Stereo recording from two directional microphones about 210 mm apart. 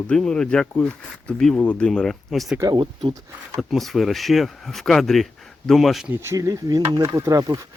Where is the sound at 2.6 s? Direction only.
20° right (ahead or behind).